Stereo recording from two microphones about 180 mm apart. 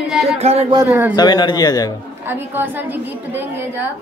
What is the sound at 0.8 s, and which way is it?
Speech, 15° right (ahead or behind).